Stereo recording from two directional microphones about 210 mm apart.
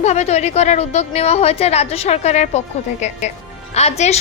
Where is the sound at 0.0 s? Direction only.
30° left (ahead or behind).